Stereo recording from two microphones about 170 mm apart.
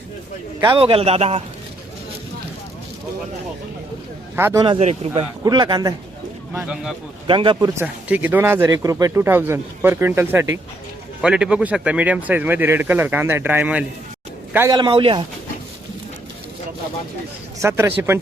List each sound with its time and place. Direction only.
0.6 s a man's voice: 30° right (ahead or behind)
4.4 s speech: 15° right (ahead or behind)
4.8 s a man's voice: 40° right (ahead or behind)
5.4 s speech: 25° right (ahead or behind)
6.5 s speech: 15° right (ahead or behind)
7.3 s speech: 30° right (ahead or behind); by 14.8 s 15° right (ahead or behind)
14.8 s a man's voice: 30° right (ahead or behind)
17.6 s speech: 15° right (ahead or behind)